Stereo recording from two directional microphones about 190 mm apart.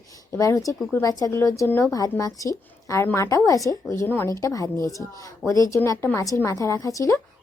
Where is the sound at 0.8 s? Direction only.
Centre (ahead or behind).